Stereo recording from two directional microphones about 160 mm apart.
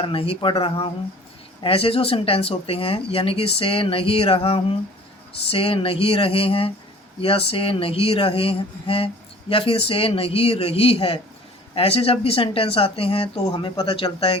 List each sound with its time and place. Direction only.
0.0 s speech: 35° left (ahead or behind)